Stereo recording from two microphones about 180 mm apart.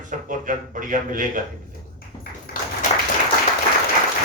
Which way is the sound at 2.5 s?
55° left (ahead or behind).